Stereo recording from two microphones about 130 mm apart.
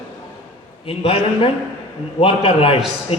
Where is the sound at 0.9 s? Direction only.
45° left (ahead or behind).